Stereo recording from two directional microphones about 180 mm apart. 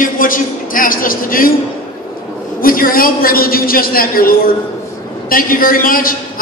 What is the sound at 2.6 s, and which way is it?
A man's voice, 55° left (ahead or behind).